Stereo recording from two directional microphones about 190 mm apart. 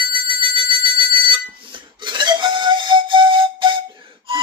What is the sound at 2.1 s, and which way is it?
Whistle, 25° right (ahead or behind).